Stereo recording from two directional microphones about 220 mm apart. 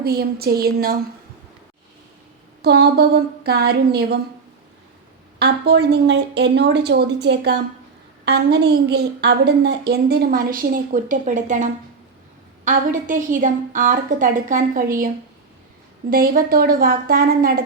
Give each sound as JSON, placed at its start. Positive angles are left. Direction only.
{"t": 0.0, "sound": "a woman's voice", "side_deg": -45}
{"t": 2.6, "sound": "a woman's voice", "side_deg": -50}
{"t": 5.4, "sound": "a woman's voice", "side_deg": -50}